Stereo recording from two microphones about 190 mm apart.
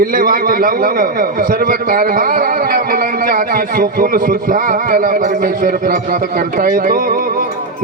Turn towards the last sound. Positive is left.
turn(degrees=-50)  # may be behind; listen again after turning